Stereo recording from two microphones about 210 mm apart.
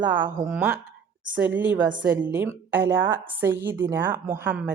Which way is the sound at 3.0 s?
65° right (ahead or behind).